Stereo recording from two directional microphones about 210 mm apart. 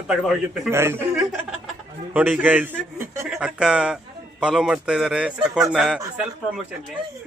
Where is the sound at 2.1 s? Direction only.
10° right (ahead or behind).